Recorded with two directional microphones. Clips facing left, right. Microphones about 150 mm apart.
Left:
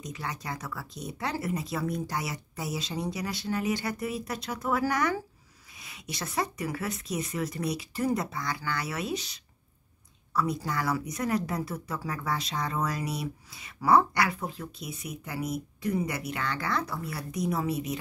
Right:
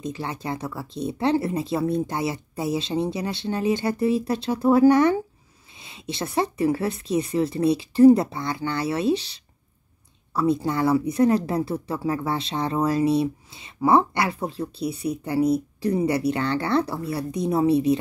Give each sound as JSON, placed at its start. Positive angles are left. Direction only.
{"t": 0.0, "sound": "speech", "side_deg": -25}